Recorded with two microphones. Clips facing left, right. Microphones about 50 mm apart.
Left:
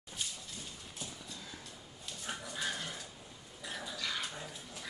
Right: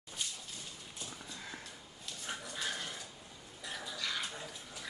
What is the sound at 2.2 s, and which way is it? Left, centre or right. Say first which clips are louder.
Dog: left 1 dB; centre.